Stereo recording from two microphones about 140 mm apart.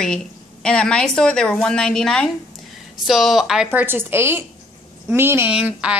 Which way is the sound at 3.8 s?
15° right (ahead or behind).